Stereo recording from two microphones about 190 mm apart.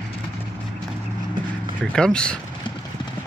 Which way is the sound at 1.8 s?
5° left (ahead or behind).